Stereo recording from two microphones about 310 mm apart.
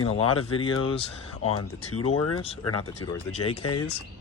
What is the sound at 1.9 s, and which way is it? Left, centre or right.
Speech, left.